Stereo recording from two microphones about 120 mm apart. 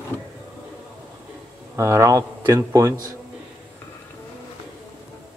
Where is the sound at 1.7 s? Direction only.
25° right (ahead or behind).